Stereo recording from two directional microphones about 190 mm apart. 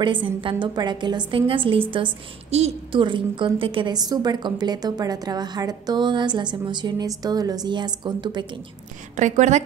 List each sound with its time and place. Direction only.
0.0 s a woman's voice: 25° right (ahead or behind)
9.1 s a woman's voice: 40° right (ahead or behind)